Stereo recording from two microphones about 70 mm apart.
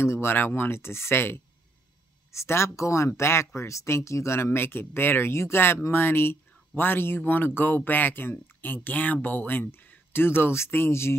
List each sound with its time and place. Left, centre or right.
0.0 s speech: left